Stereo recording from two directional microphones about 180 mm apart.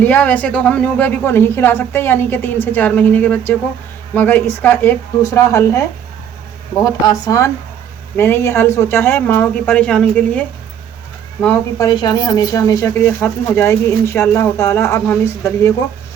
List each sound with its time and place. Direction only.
0.0 s speech: 5° left (ahead or behind)
6.8 s speech: 20° left (ahead or behind)
11.8 s speech: 25° left (ahead or behind)